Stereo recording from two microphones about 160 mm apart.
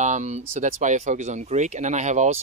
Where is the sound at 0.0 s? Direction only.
45° right (ahead or behind).